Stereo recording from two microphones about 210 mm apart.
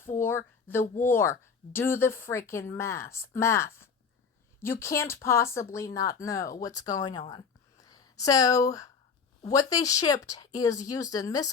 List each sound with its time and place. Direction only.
0.2 s speech: 10° left (ahead or behind)